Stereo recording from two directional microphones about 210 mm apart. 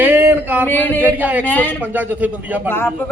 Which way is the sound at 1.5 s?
10° left (ahead or behind).